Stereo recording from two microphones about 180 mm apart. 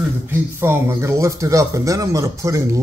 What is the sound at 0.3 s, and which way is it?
Speech, 10° right (ahead or behind).